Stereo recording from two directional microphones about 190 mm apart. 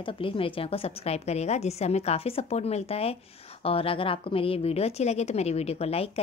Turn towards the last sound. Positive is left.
turn(degrees=30)  # may be behind; listen again after turning